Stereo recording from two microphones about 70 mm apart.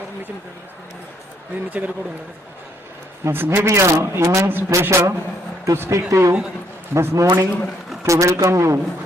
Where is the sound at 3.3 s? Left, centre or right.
Right.